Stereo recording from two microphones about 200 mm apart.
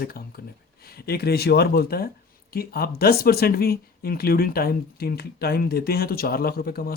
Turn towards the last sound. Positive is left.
turn(degrees=50)  # may be behind; listen again after turning